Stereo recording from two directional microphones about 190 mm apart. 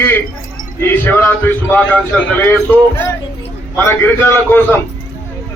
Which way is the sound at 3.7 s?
10° left (ahead or behind).